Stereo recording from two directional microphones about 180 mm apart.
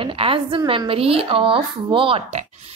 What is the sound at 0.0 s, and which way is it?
A woman's voice, 30° right (ahead or behind).